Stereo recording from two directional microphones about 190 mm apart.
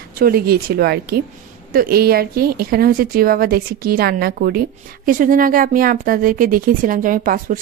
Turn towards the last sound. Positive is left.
turn(degrees=-45)  # may be behind; listen again after turning